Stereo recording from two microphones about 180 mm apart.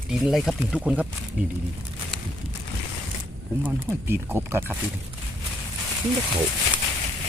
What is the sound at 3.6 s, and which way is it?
Speech, 10° right (ahead or behind).